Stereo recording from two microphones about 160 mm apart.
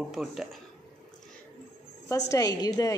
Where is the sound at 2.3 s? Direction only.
25° left (ahead or behind).